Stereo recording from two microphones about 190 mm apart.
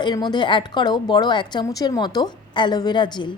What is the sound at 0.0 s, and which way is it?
A woman's voice, 20° left (ahead or behind).